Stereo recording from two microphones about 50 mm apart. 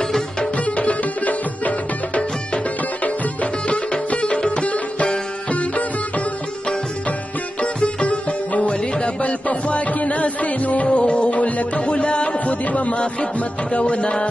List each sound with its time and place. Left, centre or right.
0.0 s music: centre
0.6 s music: left
7.6 s sitar: left
8.9 s music: left